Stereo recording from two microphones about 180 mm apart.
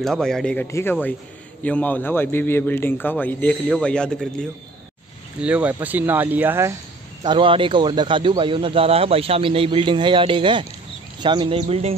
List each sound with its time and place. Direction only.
0.0 s speech: centre (ahead or behind)
0.7 s a man's voice: 15° left (ahead or behind)
5.4 s speech: 5° right (ahead or behind)
7.2 s speech: 30° right (ahead or behind)